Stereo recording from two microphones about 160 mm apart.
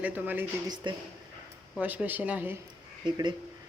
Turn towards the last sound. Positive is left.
turn(degrees=-30)  # may be behind; listen again after turning